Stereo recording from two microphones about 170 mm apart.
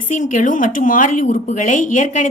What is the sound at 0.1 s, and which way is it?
Speech, 50° left (ahead or behind).